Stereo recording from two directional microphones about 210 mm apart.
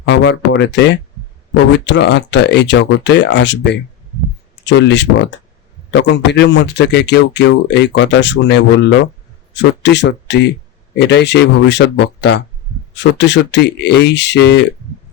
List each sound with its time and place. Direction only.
0.0 s speech: 60° left (ahead or behind)